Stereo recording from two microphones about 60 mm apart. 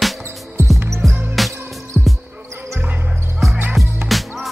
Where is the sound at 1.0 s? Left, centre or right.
Centre.